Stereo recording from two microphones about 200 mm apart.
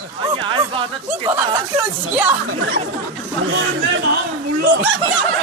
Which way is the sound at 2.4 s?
65° right (ahead or behind).